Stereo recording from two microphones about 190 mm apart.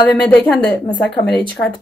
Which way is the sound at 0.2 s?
5° left (ahead or behind).